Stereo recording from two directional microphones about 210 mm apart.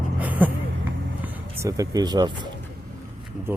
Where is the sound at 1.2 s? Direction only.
15° right (ahead or behind).